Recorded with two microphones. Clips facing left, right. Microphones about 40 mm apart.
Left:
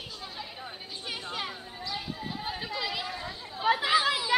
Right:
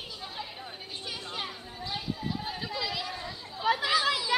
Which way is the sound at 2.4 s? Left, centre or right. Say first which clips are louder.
Left 1 dB; centre.